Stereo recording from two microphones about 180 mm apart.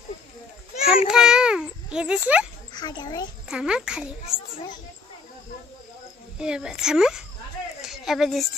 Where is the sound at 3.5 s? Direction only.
5° right (ahead or behind).